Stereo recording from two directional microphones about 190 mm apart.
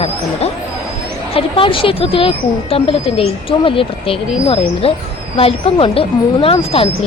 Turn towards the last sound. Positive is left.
turn(degrees=30)  # may be behind; listen again after turning